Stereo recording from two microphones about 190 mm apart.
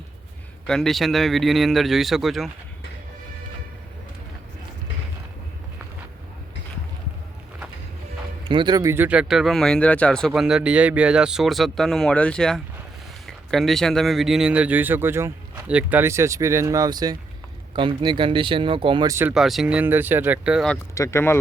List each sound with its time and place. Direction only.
0.7 s speech: centre (ahead or behind)
8.4 s a man's voice: 25° right (ahead or behind)
19.3 s speech: centre (ahead or behind)
20.9 s speech: 15° left (ahead or behind)